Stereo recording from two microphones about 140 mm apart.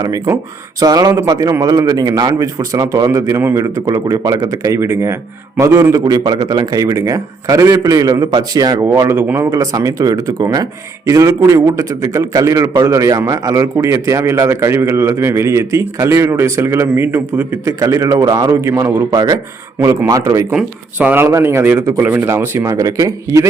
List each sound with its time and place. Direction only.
0.0 s a man's voice: 25° right (ahead or behind)
20.5 s a man's voice: 10° right (ahead or behind)